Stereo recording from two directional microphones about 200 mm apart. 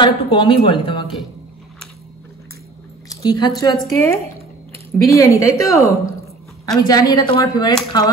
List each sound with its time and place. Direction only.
0.0 s speech: 25° left (ahead or behind)
3.1 s speech: 20° left (ahead or behind)